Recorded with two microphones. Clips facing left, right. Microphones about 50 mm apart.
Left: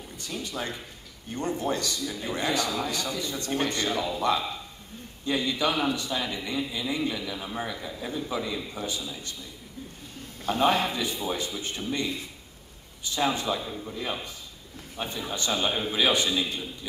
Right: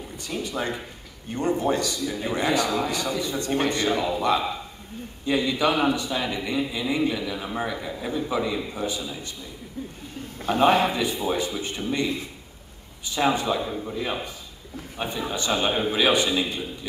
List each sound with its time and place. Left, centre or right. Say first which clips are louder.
0.3 s a man's voice: right 5 dB; right
10.8 s a man's voice: right 5 dB; right